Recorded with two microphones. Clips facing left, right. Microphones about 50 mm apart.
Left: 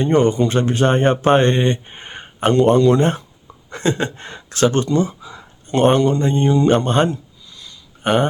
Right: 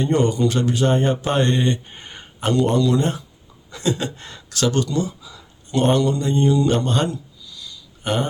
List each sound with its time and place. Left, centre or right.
0.1 s speech: left